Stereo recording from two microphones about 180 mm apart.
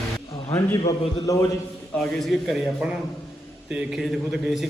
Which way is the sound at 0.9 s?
20° left (ahead or behind).